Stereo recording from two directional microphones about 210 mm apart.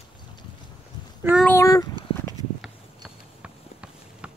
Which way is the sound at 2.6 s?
5° right (ahead or behind).